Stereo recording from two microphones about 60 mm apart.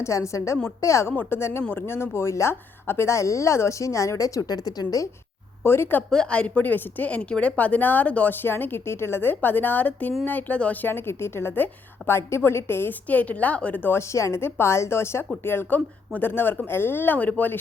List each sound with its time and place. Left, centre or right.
0.0 s a woman's voice: left
1.1 s a woman's voice: left
1.4 s speech: left
3.1 s a woman's voice: left
5.6 s a woman's voice: left
6.1 s a woman's voice: centre
10.8 s speech: left
11.5 s a woman's voice: left
12.1 s a woman's voice: left
13.1 s a woman's voice: left
13.9 s a woman's voice: left